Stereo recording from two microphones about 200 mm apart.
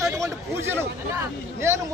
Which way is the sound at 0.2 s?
10° right (ahead or behind).